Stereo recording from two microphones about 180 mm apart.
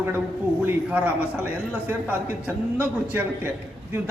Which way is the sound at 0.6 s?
10° right (ahead or behind).